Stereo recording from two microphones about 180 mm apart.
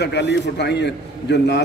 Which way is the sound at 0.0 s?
70° left (ahead or behind).